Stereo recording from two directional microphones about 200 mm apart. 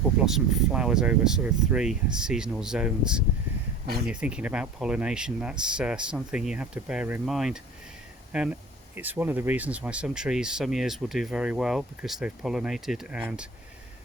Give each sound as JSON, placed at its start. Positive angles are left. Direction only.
{"t": 0.3, "sound": "speech", "side_deg": -5}
{"t": 3.8, "sound": "speech", "side_deg": -50}
{"t": 4.1, "sound": "speech", "side_deg": -5}